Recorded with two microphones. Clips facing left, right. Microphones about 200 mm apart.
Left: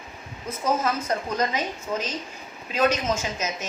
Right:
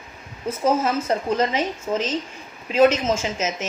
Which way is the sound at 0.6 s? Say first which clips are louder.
Right 4 dB; 25° right (ahead or behind).